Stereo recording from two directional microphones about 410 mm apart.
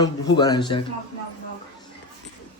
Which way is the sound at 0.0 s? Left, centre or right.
Centre.